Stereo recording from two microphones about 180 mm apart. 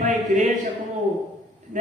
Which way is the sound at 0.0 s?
45° right (ahead or behind).